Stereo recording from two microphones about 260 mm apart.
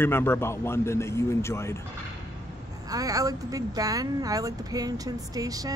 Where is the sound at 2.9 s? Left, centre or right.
Centre.